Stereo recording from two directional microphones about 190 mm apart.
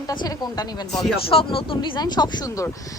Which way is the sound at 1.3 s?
30° left (ahead or behind).